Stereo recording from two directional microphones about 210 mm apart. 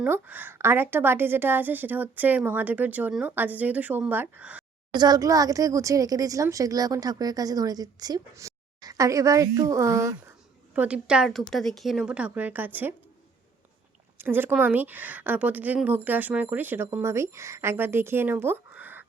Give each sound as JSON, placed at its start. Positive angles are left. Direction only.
{"t": 0.0, "sound": "speech", "side_deg": -10}
{"t": 4.9, "sound": "a woman's voice", "side_deg": -20}
{"t": 14.2, "sound": "speech", "side_deg": -10}